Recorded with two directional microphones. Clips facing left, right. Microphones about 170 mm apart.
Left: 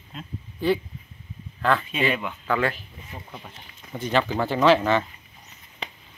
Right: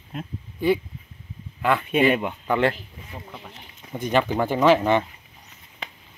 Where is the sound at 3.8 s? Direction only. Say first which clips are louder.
Right 2 dB; 15° right (ahead or behind).